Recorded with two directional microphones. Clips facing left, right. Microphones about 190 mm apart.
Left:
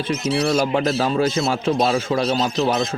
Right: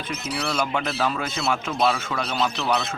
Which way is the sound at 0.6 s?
35° left (ahead or behind).